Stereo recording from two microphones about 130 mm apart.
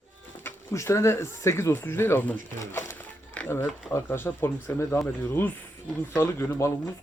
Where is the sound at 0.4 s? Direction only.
20° left (ahead or behind).